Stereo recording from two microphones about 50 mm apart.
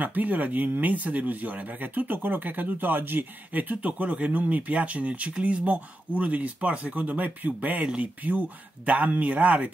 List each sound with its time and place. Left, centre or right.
0.0 s speech: right
7.8 s speech: right
8.2 s speech: right